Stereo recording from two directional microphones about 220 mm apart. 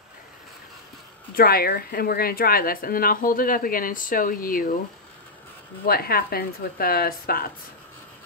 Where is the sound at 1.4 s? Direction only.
40° left (ahead or behind).